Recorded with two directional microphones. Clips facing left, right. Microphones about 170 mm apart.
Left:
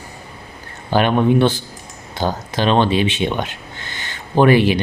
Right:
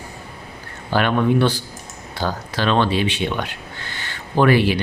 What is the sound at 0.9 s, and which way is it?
Speech, 20° left (ahead or behind).